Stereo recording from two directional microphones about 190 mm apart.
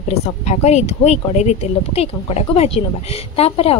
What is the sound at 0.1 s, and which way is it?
A woman's voice, 35° left (ahead or behind).